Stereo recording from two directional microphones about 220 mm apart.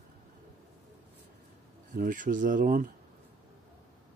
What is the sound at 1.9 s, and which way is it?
Speech, 35° right (ahead or behind).